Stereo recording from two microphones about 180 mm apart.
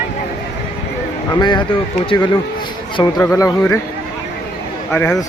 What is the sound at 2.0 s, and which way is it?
Speech, 25° left (ahead or behind).